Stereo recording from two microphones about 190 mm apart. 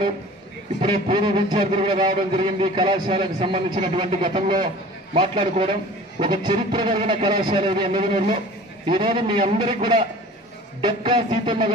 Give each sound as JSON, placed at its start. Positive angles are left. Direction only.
{"t": 0.7, "sound": "a man's voice", "side_deg": -25}